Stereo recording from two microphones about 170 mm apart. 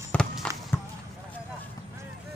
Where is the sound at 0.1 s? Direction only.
5° left (ahead or behind).